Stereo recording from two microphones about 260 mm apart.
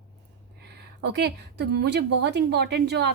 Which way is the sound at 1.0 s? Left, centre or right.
Right.